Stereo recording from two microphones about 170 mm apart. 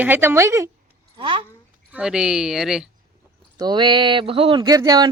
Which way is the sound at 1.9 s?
5° right (ahead or behind).